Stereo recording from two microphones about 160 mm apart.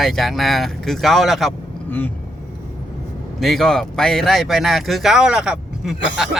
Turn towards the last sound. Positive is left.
turn(degrees=-5)  # may be behind; listen again after turning